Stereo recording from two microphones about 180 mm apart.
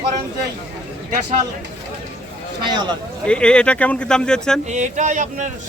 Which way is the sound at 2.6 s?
25° right (ahead or behind).